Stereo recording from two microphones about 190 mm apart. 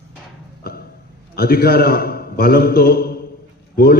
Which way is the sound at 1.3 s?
55° left (ahead or behind).